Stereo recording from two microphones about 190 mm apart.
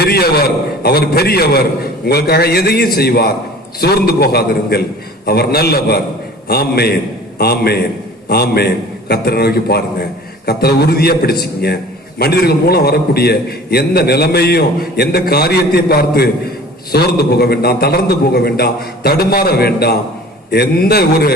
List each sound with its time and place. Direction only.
0.0 s a man's voice: 55° left (ahead or behind)